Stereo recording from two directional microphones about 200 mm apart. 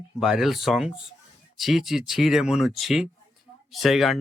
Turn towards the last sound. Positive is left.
turn(degrees=0)  # may be behind; listen again after turning